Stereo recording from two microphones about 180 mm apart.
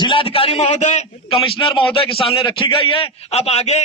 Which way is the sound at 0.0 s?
30° left (ahead or behind).